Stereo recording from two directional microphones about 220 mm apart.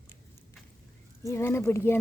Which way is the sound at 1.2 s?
10° left (ahead or behind).